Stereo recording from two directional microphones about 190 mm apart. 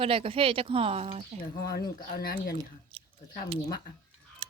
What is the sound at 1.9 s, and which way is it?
Speech, 50° left (ahead or behind).